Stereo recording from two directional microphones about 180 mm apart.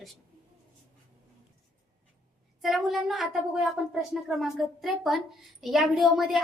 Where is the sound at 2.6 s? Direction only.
Centre (ahead or behind).